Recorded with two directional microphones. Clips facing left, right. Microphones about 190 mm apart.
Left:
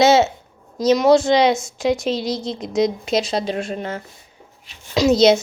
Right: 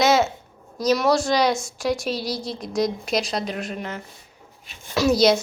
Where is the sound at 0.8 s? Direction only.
25° left (ahead or behind).